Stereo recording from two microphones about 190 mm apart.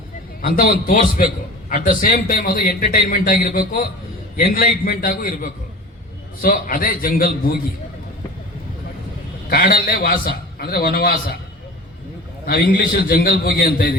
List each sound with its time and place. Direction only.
0.4 s a man's voice: 50° left (ahead or behind)
9.5 s a man's voice: 50° left (ahead or behind)
12.5 s a man's voice: 50° left (ahead or behind)